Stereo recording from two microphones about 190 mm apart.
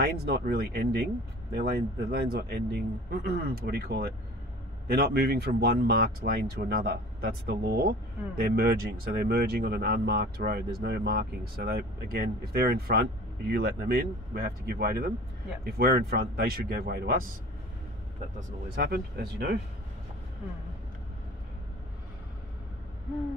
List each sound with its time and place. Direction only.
0.0 s speech: 55° right (ahead or behind)
18.8 s speech: 55° right (ahead or behind)